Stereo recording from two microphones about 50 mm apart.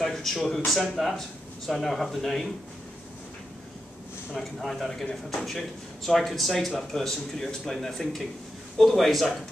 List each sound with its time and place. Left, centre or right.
0.0 s speech: centre
4.3 s speech: centre